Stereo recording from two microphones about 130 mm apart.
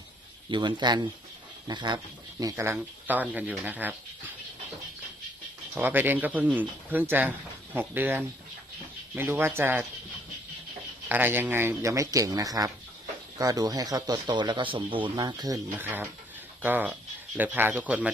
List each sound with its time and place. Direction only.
0.5 s speech: 35° right (ahead or behind)
2.4 s speech: 25° right (ahead or behind)
5.8 s speech: 15° right (ahead or behind)
11.1 s speech: 15° right (ahead or behind)
15.8 s speech: 15° right (ahead or behind)